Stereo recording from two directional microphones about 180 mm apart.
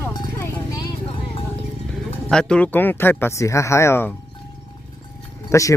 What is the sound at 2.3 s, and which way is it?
Speech, 5° left (ahead or behind).